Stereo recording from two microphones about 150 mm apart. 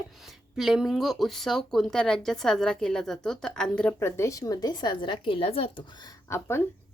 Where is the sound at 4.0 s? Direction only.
15° left (ahead or behind).